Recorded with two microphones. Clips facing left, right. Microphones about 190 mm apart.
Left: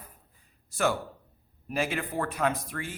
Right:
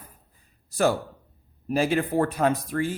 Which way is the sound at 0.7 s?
35° right (ahead or behind).